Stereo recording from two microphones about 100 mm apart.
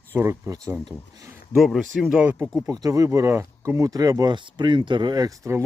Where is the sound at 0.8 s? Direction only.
40° right (ahead or behind).